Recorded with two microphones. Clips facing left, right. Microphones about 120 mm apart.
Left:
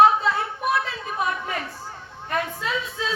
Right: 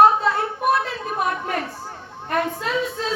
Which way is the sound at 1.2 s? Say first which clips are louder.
Right 3 dB; 55° right (ahead or behind).